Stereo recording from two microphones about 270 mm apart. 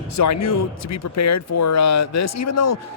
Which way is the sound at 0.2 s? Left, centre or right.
Left.